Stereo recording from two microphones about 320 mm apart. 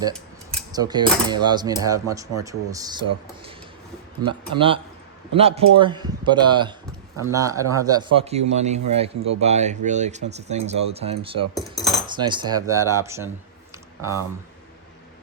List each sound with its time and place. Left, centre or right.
0.7 s speech: centre
4.3 s speech: centre
11.8 s cutlery: centre
12.1 s speech: centre